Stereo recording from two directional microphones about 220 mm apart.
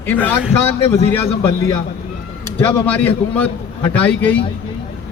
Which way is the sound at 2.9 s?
5° left (ahead or behind).